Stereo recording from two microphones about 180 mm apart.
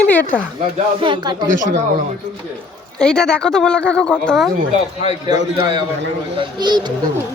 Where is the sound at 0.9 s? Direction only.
25° right (ahead or behind).